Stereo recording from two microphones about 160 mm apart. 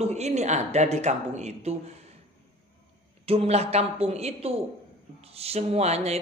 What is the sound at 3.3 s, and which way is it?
Speech, 40° right (ahead or behind).